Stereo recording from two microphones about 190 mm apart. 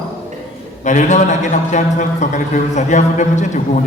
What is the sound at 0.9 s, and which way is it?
A man's voice, 40° left (ahead or behind).